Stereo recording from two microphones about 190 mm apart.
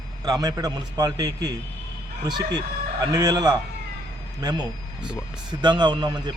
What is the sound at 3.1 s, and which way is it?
Speech, 20° right (ahead or behind).